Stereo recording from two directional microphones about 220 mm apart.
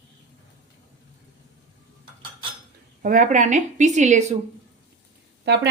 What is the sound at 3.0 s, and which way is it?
A woman's voice, 35° right (ahead or behind).